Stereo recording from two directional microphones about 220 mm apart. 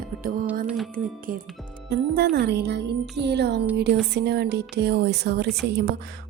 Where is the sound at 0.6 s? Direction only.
Centre (ahead or behind).